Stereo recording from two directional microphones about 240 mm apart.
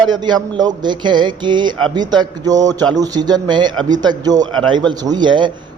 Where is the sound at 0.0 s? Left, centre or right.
Centre.